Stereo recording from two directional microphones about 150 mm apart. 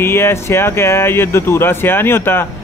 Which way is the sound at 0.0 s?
15° left (ahead or behind).